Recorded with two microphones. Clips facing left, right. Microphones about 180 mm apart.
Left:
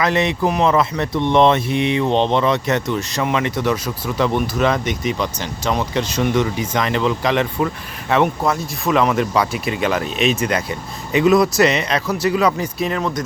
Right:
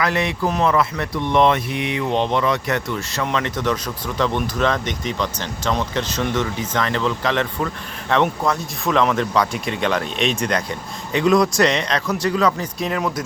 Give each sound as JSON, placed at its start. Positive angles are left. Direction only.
{"t": 0.0, "sound": "speech", "side_deg": 20}
{"t": 12.8, "sound": "speech", "side_deg": -5}